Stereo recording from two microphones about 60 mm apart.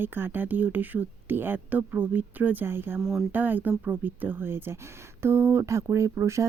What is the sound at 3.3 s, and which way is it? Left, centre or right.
Speech, right.